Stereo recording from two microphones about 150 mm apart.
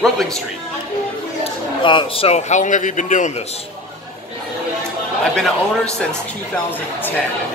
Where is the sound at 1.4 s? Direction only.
35° left (ahead or behind); by 3.3 s 55° left (ahead or behind).